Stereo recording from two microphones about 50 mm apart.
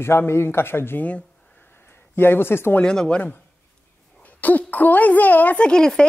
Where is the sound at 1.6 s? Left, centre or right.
Left.